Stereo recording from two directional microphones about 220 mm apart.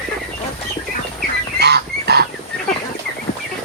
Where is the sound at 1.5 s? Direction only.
50° right (ahead or behind).